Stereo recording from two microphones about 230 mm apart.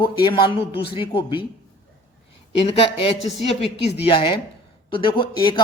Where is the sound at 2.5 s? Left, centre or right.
Left.